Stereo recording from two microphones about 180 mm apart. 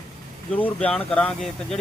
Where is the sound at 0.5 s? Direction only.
5° left (ahead or behind).